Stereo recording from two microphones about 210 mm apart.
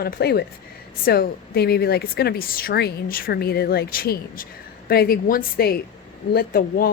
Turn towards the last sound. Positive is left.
turn(degrees=45)  # may be behind; listen again after turning